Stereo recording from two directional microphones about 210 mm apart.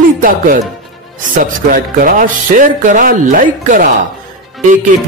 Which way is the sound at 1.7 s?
40° right (ahead or behind).